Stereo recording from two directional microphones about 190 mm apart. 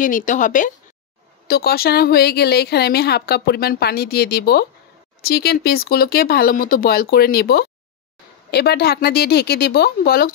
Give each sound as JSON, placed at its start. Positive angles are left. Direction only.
{"t": 0.0, "sound": "speech", "side_deg": 45}
{"t": 1.5, "sound": "a woman's voice", "side_deg": 55}